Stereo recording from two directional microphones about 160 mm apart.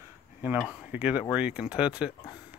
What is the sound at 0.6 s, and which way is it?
Speech, 5° right (ahead or behind).